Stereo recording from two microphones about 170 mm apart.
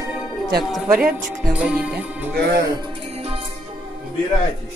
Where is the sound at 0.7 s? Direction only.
5° right (ahead or behind).